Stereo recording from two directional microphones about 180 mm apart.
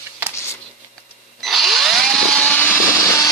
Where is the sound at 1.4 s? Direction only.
Centre (ahead or behind).